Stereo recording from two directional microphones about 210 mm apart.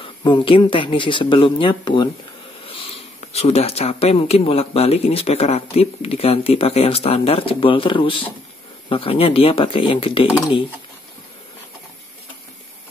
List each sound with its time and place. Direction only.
0.0 s speech: 25° left (ahead or behind)